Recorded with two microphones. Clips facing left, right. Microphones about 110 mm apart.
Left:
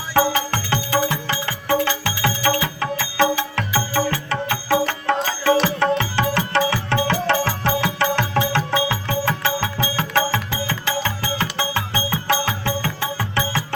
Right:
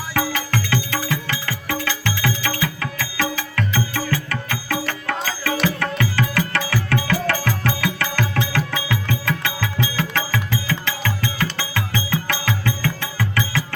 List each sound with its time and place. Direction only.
0.1 s music: 30° left (ahead or behind)